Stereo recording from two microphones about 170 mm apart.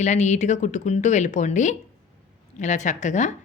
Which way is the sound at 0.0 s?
45° left (ahead or behind).